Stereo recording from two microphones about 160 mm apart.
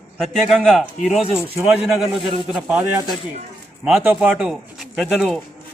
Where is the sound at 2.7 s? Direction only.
20° right (ahead or behind).